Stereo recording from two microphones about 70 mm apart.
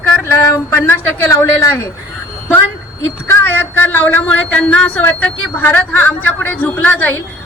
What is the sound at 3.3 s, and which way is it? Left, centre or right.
A woman's voice, left.